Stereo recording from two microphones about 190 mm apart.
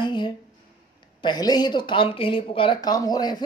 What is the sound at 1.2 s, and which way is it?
A woman's voice, 20° left (ahead or behind).